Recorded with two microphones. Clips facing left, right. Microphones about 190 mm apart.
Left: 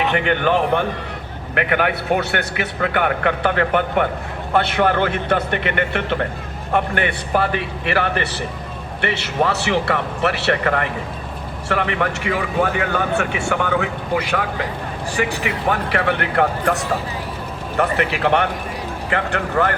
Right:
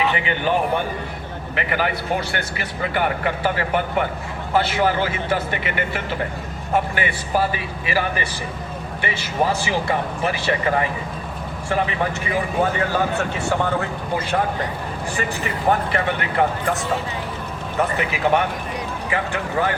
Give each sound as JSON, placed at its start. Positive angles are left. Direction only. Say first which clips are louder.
{"t": 1.5, "sound": "a man's voice", "louder": "left 4 dB", "side_deg": 60}